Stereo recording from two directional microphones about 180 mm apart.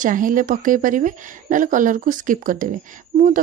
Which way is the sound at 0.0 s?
45° right (ahead or behind).